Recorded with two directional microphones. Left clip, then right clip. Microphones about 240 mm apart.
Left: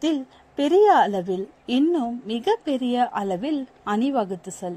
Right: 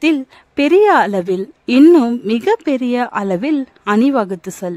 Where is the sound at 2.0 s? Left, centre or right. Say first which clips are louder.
Right 11 dB; right.